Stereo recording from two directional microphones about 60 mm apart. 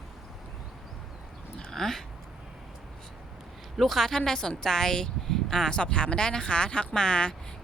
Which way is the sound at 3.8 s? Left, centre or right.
Centre.